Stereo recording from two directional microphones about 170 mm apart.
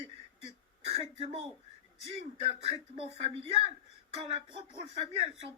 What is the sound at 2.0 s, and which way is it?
Speech, 35° right (ahead or behind).